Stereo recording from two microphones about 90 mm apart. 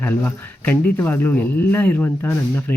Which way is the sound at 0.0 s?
20° left (ahead or behind).